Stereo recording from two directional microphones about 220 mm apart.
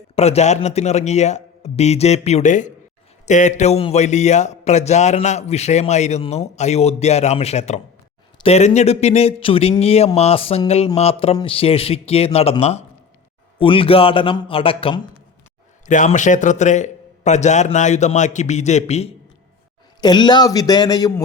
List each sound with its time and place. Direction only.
0.2 s a man's voice: 30° left (ahead or behind)
15.9 s a man's voice: 35° left (ahead or behind)
20.0 s a man's voice: 20° left (ahead or behind)